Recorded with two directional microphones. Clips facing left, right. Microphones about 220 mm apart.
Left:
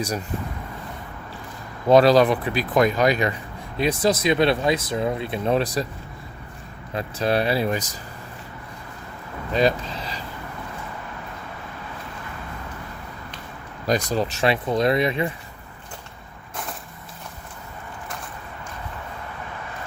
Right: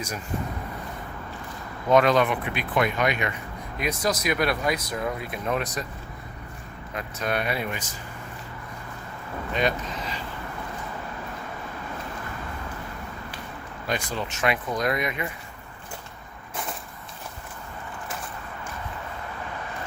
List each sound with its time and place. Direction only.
1.9 s speech: 35° left (ahead or behind)
6.9 s speech: 30° left (ahead or behind)
9.5 s speech: 35° left (ahead or behind)
13.8 s speech: 40° left (ahead or behind)